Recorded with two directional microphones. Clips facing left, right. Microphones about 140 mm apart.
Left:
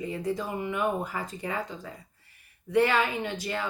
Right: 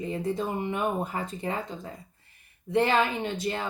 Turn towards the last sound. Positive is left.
turn(degrees=-25)  # may be behind; listen again after turning